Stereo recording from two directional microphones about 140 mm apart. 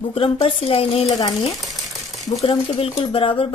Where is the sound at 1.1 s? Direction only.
30° left (ahead or behind).